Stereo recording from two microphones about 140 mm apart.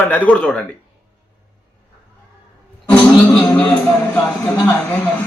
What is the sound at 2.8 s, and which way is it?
Music, 10° left (ahead or behind).